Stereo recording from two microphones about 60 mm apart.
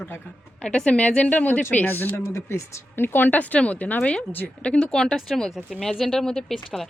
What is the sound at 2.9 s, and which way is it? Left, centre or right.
Speech, left.